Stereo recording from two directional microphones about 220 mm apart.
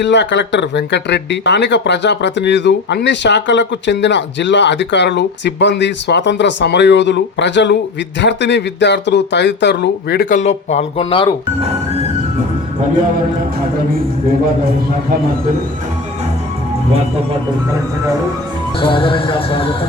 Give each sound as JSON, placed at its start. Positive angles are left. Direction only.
{"t": 0.0, "sound": "speech", "side_deg": 55}
{"t": 18.8, "sound": "speech", "side_deg": 25}